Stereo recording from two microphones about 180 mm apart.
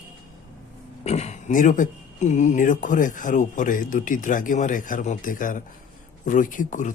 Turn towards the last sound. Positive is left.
turn(degrees=45)  # may be behind; listen again after turning